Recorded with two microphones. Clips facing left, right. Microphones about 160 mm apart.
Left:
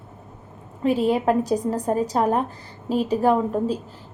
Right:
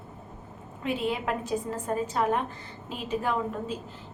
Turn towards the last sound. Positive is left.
turn(degrees=35)  # may be behind; listen again after turning